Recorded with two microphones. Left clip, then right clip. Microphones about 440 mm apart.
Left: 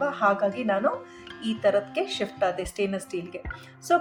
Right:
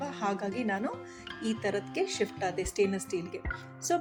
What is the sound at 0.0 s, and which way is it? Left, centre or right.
Speech, right.